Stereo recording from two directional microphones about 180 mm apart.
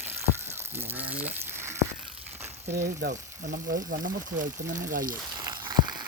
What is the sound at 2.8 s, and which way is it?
Speech, 60° right (ahead or behind).